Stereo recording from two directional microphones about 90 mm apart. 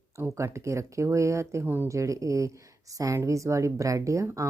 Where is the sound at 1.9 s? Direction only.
35° right (ahead or behind).